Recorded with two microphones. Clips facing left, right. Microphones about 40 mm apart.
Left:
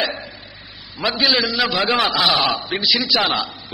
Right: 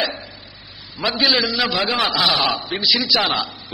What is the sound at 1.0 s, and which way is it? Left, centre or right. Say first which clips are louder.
A man's voice: even; centre.